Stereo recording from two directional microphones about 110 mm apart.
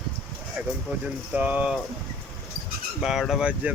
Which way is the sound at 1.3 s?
10° right (ahead or behind).